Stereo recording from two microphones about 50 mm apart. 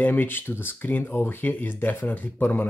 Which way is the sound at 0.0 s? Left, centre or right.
Left.